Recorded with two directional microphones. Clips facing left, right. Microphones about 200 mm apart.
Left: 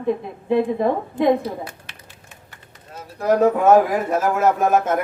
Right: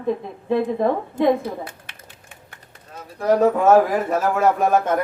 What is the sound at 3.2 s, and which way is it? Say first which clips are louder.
Speech: even; 15° left (ahead or behind).